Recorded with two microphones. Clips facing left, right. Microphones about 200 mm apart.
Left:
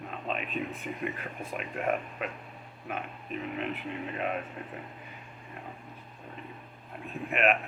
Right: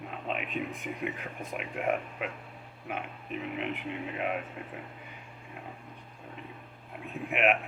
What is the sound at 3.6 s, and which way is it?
Speech, 10° right (ahead or behind).